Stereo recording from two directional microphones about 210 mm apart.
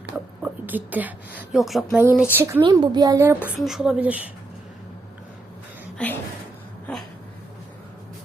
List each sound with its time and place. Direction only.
0.4 s a woman's voice: 10° right (ahead or behind)
2.6 s a woman's voice: 20° right (ahead or behind)
3.6 s speech: centre (ahead or behind)
6.0 s speech: 5° left (ahead or behind)